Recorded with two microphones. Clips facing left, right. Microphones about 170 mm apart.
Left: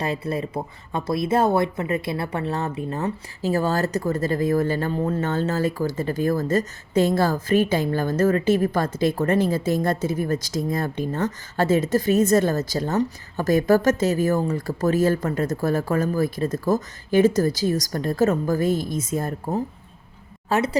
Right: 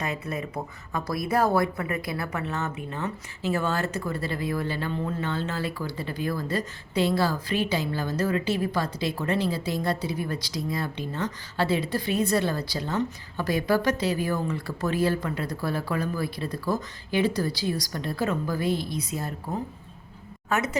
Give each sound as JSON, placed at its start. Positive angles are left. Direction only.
{"t": 0.0, "sound": "speech", "side_deg": 30}
{"t": 20.5, "sound": "a woman's voice", "side_deg": 30}